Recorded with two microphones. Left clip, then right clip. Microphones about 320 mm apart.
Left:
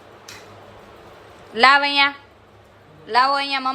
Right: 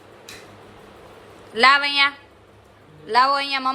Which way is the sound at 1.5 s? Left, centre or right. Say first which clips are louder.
Left 1 dB; centre.